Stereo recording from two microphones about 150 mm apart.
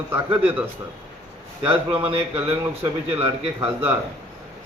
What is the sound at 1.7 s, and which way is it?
Speech, 40° right (ahead or behind).